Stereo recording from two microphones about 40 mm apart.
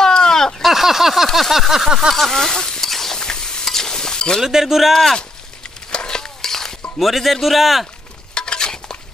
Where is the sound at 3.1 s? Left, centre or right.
Centre.